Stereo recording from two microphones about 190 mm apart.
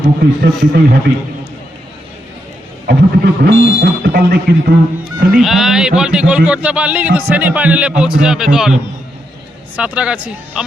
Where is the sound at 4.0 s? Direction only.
55° right (ahead or behind).